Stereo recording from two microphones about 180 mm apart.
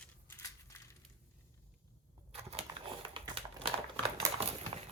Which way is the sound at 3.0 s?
30° right (ahead or behind).